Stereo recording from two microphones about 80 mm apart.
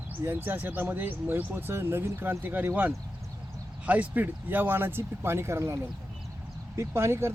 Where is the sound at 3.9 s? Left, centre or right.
Right.